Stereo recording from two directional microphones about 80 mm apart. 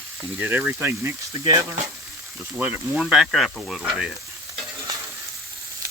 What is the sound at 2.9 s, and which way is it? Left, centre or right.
Speech, centre.